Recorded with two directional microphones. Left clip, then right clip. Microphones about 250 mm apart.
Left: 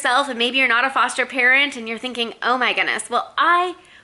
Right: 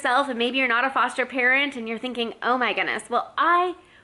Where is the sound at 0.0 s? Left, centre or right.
Centre.